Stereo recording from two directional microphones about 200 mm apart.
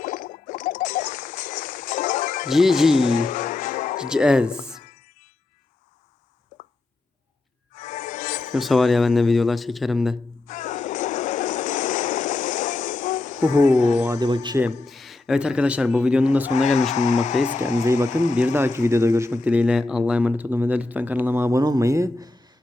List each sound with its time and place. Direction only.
0.0 s a sound: 40° left (ahead or behind)
2.5 s a man's voice: centre (ahead or behind)
3.0 s music: 40° left (ahead or behind)
3.9 s speech: 5° right (ahead or behind)
7.8 s music: 40° left (ahead or behind)
8.5 s a man's voice: centre (ahead or behind)
10.4 s a sound: 40° left (ahead or behind)
14.0 s speech: 15° right (ahead or behind)
14.8 s a man's voice: centre (ahead or behind)
16.5 s speech: 35° left (ahead or behind)
18.3 s speech: 10° right (ahead or behind)